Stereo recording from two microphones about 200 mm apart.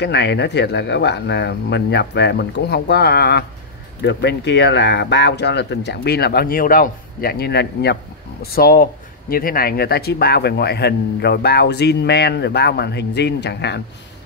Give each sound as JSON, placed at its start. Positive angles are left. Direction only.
{"t": 0.0, "sound": "speech", "side_deg": 60}